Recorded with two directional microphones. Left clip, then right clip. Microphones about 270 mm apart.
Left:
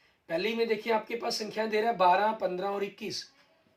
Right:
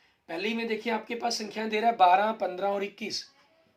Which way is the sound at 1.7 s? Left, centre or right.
Right.